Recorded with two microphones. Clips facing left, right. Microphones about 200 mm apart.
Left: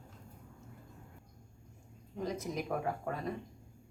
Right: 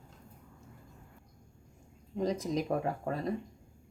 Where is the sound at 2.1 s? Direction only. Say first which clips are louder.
Right 6 dB; 35° right (ahead or behind).